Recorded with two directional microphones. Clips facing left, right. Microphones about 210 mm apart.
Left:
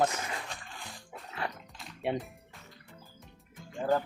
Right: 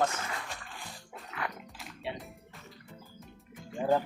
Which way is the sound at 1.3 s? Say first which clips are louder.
Left 1 dB; 30° left (ahead or behind).